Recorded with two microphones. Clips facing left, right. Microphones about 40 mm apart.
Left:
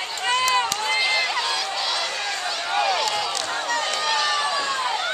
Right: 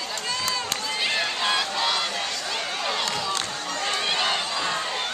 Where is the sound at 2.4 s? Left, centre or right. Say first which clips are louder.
Left 5 dB; left.